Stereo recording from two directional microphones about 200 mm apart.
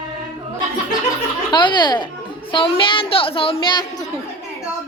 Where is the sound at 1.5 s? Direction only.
20° left (ahead or behind).